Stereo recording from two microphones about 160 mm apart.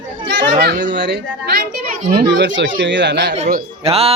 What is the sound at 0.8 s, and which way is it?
Speech, 90° right.